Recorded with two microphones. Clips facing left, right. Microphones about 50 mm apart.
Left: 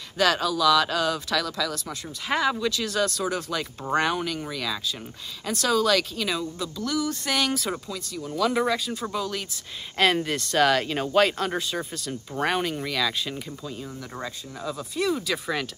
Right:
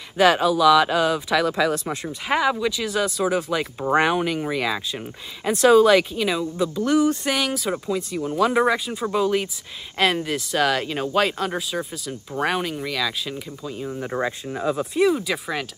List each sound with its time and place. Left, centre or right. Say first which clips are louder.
0.2 s speech: right 6 dB; centre
2.2 s speech: right 3 dB; centre
6.8 s speech: right 8 dB; right
7.2 s speech: right 3 dB; centre
7.8 s speech: right 9 dB; right
9.9 s speech: right 1 dB; centre
13.9 s speech: right 9 dB; right
15.0 s speech: right 4 dB; centre